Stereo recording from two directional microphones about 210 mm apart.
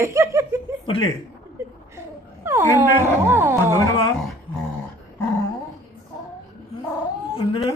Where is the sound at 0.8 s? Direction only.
25° left (ahead or behind).